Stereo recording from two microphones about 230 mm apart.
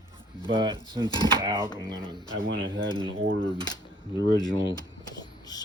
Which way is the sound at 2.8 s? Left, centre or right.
Centre.